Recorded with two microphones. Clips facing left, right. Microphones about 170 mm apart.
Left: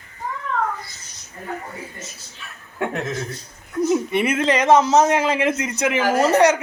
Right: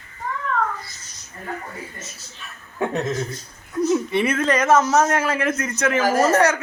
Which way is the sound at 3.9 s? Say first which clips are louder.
Left 1 dB; 10° left (ahead or behind).